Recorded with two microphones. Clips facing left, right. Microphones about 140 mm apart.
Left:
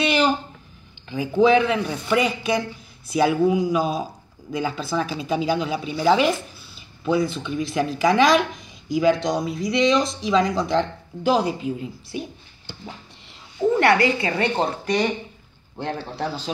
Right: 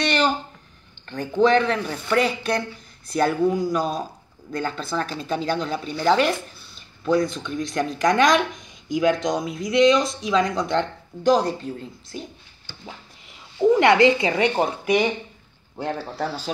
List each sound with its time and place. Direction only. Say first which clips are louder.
0.0 s a sound: left 2 dB; 5° left (ahead or behind)
1.0 s speech: left 1 dB; 5° left (ahead or behind)
13.6 s a woman's voice: right 2 dB; 15° right (ahead or behind); by 16.4 s centre (ahead or behind)